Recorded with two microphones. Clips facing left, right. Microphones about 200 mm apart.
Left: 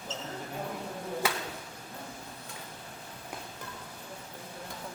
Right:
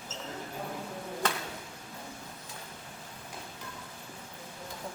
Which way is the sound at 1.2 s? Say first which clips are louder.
Even; 10° left (ahead or behind).